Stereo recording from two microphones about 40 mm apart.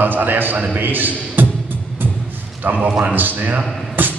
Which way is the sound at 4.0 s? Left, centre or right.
Right.